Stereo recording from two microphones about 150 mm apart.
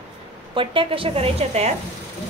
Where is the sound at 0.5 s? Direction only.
35° right (ahead or behind).